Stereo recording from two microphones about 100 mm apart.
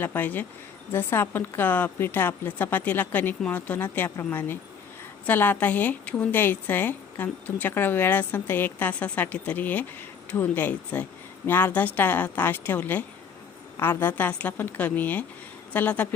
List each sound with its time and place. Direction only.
0.0 s a woman's voice: 15° left (ahead or behind)